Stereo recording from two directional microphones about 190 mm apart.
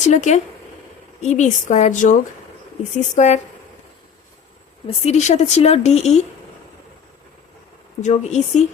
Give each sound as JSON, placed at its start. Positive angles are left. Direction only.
{"t": 0.0, "sound": "a woman's voice", "side_deg": 40}
{"t": 3.2, "sound": "a woman's voice", "side_deg": 40}
{"t": 4.9, "sound": "a woman's voice", "side_deg": 35}
{"t": 8.0, "sound": "a woman's voice", "side_deg": 40}